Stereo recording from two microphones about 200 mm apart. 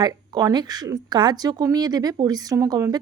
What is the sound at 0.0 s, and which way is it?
Speech, 20° right (ahead or behind).